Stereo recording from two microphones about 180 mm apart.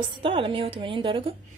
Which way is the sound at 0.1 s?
30° right (ahead or behind).